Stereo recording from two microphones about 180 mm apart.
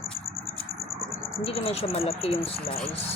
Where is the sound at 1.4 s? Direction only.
30° left (ahead or behind).